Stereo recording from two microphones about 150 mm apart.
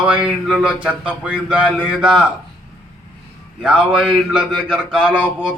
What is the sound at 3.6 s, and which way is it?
A man's voice, 10° right (ahead or behind).